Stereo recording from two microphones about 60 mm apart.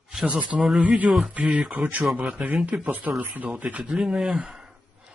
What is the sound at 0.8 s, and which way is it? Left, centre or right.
Speech, right.